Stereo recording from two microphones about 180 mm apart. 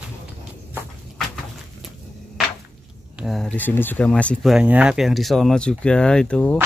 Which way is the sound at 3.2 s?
Centre (ahead or behind).